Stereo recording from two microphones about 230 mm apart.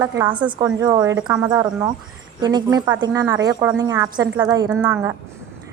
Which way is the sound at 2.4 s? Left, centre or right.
Centre.